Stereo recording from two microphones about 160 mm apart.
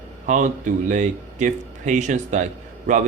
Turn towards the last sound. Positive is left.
turn(degrees=-50)  # may be behind; listen again after turning